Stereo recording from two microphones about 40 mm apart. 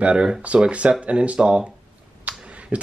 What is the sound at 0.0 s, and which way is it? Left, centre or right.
Speech, right.